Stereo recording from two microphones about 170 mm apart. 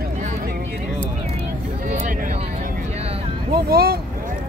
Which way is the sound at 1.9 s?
45° right (ahead or behind).